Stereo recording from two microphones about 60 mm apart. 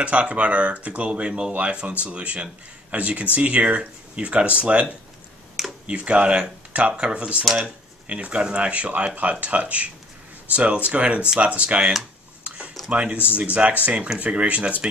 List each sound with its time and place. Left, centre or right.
0.0 s speech: right
5.9 s speech: centre
12.4 s a sound: centre
12.9 s speech: right